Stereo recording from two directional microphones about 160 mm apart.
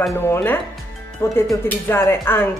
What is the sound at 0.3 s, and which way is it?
Speech, 15° left (ahead or behind).